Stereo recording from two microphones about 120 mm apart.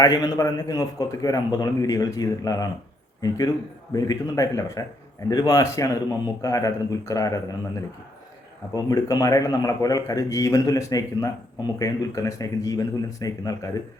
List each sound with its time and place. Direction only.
0.0 s a man's voice: 30° left (ahead or behind)
8.7 s speech: 30° left (ahead or behind)